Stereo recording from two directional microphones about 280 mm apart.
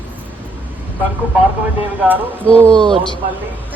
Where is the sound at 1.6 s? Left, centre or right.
Centre.